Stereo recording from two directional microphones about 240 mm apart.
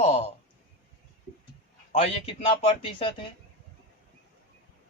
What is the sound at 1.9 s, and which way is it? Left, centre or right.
A man's voice, left.